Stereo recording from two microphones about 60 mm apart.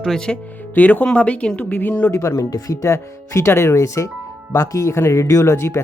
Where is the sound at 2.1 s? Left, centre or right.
Left.